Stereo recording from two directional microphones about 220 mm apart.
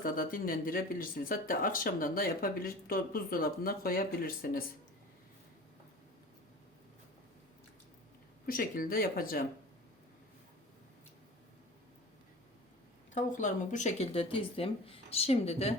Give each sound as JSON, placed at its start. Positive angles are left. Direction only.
{"t": 0.0, "sound": "speech", "side_deg": 40}
{"t": 8.4, "sound": "speech", "side_deg": 40}
{"t": 13.1, "sound": "speech", "side_deg": 35}